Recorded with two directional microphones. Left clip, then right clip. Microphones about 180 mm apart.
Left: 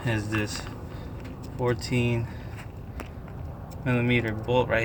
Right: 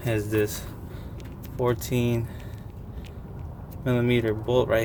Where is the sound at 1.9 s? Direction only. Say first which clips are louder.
Right 1 dB; 35° right (ahead or behind).